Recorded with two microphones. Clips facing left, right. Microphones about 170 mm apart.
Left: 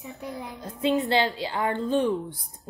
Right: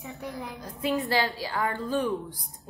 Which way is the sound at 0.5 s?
25° left (ahead or behind).